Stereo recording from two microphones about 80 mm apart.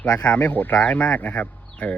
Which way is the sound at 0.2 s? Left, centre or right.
Centre.